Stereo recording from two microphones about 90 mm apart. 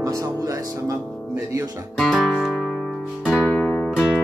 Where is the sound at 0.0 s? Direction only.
35° right (ahead or behind).